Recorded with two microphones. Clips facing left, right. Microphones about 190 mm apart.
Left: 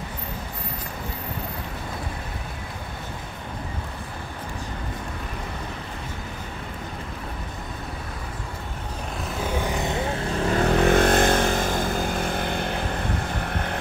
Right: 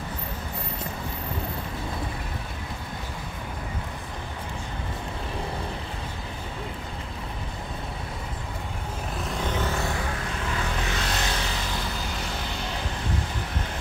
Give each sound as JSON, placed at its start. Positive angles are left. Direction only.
{"t": 9.4, "sound": "vehicle", "side_deg": 10}
{"t": 10.5, "sound": "vehicle", "side_deg": 50}